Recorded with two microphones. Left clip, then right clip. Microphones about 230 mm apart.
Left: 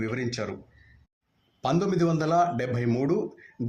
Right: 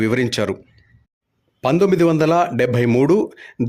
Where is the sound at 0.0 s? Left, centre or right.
Right.